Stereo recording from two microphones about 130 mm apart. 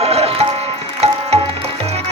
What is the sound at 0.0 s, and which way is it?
Music, 50° right (ahead or behind).